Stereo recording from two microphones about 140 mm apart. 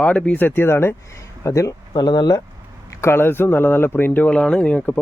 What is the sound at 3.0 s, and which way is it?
Speech, 15° left (ahead or behind).